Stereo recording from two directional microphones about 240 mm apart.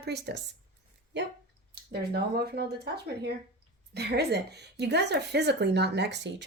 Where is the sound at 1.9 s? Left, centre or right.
Right.